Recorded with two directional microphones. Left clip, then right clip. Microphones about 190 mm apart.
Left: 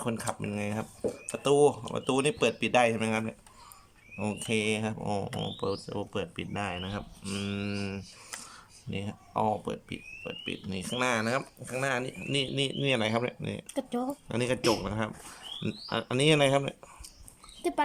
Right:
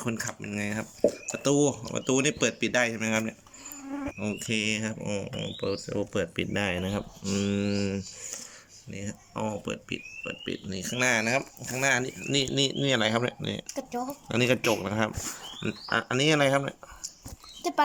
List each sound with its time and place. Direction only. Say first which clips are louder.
0.0 s speech: even; 15° left (ahead or behind)
8.9 s speech: left 2 dB; 15° left (ahead or behind)
15.6 s speech: right 5 dB; 20° left (ahead or behind)